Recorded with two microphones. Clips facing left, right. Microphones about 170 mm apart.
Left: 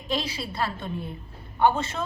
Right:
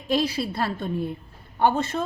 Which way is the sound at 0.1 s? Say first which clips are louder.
Right 6 dB; 50° right (ahead or behind).